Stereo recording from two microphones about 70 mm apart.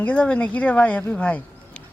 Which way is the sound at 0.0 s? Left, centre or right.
Centre.